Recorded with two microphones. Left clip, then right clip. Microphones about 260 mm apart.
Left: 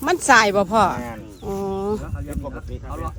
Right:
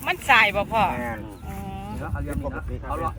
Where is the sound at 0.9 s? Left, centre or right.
Centre.